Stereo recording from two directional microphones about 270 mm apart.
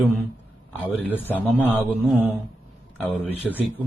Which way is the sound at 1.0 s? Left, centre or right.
Centre.